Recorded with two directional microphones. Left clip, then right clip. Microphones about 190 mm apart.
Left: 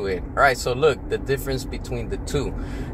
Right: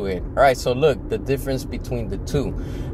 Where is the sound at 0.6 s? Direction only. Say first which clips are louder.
Right 1 dB; 20° right (ahead or behind).